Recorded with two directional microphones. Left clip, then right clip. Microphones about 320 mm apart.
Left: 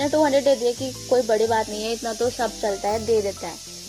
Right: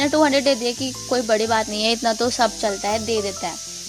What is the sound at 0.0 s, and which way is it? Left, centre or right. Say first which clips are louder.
Speech: right 1 dB; right.